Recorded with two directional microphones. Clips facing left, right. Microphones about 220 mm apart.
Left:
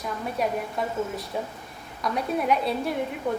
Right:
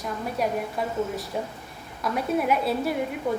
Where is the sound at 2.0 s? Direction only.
5° right (ahead or behind).